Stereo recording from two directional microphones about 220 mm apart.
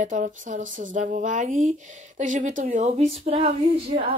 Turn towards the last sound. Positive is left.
turn(degrees=-25)  # may be behind; listen again after turning